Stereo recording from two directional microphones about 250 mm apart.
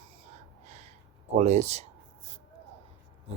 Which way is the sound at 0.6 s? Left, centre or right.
Right.